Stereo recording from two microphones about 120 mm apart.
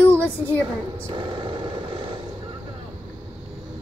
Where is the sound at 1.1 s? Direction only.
45° right (ahead or behind).